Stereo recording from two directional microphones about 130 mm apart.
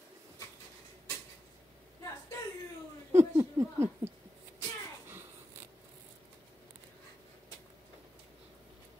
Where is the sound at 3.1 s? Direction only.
20° right (ahead or behind).